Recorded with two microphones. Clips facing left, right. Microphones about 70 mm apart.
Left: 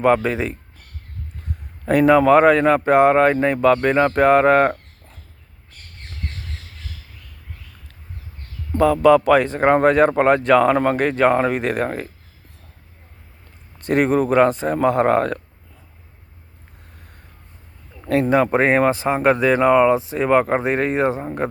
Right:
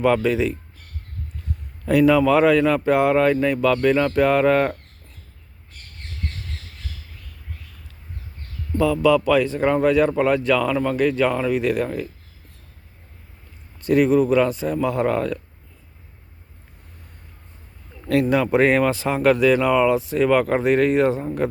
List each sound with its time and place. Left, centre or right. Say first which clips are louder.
0.0 s speech: left 1 dB; left
1.8 s speech: left 2 dB; left
8.7 s speech: left 4 dB; left
13.8 s speech: right 1 dB; left
18.1 s speech: left 2 dB; left